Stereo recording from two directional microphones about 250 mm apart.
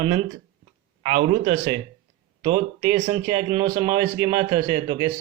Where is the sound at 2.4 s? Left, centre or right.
Centre.